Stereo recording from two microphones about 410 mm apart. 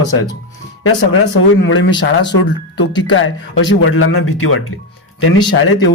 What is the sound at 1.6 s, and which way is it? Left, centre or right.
Speech, left.